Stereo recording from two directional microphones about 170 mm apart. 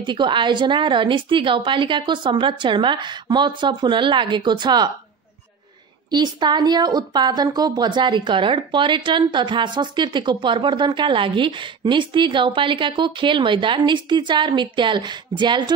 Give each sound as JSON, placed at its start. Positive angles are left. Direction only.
{"t": 0.0, "sound": "a woman's voice", "side_deg": -25}
{"t": 6.0, "sound": "a woman's voice", "side_deg": -25}